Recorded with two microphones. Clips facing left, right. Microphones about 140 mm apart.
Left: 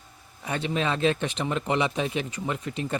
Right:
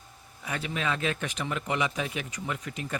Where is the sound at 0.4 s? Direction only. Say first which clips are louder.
Left 4 dB; 30° left (ahead or behind).